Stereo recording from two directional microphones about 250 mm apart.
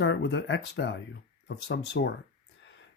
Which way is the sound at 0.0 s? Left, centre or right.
Left.